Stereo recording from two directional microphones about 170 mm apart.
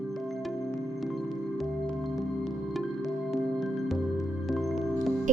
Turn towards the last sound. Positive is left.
turn(degrees=0)  # may be behind; listen again after turning